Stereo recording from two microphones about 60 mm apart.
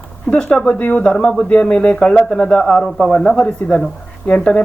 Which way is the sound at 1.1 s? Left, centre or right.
Centre.